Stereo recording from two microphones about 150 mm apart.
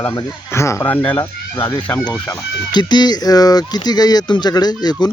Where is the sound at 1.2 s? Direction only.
25° left (ahead or behind).